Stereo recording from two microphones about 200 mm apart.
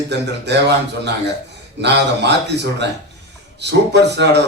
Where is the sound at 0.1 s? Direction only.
60° right (ahead or behind).